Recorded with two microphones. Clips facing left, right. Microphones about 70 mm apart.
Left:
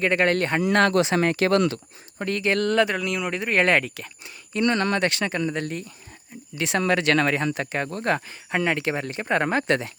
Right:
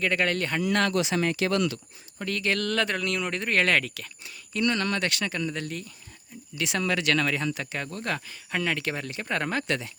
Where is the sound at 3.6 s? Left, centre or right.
Left.